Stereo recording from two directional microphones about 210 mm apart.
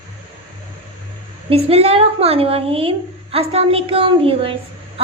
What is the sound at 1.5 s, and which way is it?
A woman's voice, 25° right (ahead or behind).